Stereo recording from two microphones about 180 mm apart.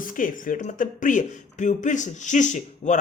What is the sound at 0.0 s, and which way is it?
Speech, 50° left (ahead or behind).